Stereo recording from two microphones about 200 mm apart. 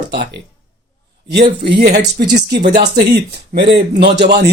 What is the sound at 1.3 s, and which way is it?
Speech, 55° right (ahead or behind).